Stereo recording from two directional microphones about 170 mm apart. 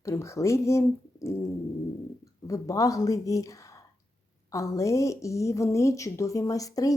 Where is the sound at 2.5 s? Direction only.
20° left (ahead or behind).